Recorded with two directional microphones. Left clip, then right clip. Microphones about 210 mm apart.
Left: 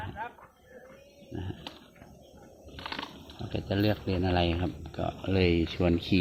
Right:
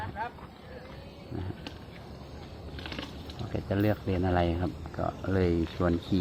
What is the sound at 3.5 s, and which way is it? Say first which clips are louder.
Speech: even; 5° left (ahead or behind).